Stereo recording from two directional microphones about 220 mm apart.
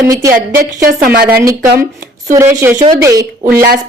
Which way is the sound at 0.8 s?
40° right (ahead or behind).